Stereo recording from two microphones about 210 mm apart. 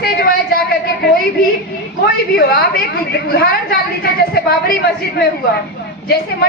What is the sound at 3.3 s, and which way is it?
A woman's voice, 45° left (ahead or behind).